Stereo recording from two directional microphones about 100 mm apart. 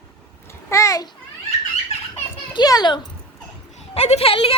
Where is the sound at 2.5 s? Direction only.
40° left (ahead or behind).